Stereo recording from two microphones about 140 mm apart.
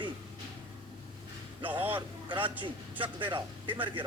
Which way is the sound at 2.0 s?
35° right (ahead or behind).